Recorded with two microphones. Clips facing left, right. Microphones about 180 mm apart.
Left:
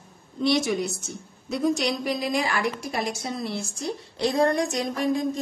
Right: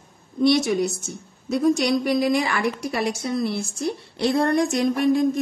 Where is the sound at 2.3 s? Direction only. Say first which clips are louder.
Right 3 dB; 60° right (ahead or behind).